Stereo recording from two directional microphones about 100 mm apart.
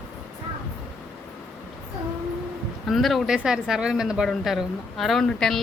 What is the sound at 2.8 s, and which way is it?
Speech, centre (ahead or behind).